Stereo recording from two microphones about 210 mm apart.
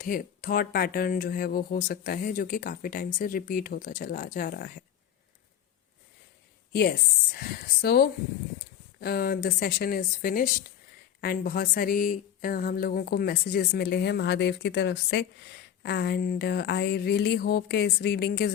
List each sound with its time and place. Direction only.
0.0 s speech: 40° left (ahead or behind)
7.3 s speech: 45° left (ahead or behind)